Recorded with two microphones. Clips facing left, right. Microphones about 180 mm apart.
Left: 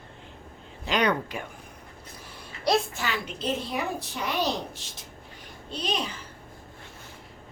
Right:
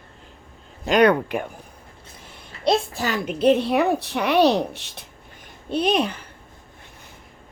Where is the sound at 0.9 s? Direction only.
55° right (ahead or behind).